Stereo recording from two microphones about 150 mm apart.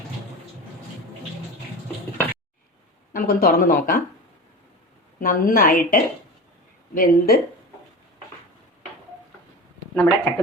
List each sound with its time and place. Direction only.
3.1 s speech: 70° left (ahead or behind)
5.2 s speech: 65° left (ahead or behind)
9.9 s speech: 15° left (ahead or behind)